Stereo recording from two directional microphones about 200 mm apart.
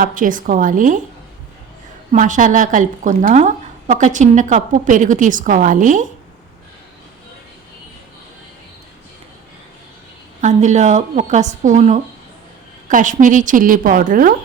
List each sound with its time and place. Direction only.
0.0 s a woman's voice: 40° right (ahead or behind)
2.1 s a woman's voice: 40° right (ahead or behind)
10.4 s a woman's voice: 35° right (ahead or behind)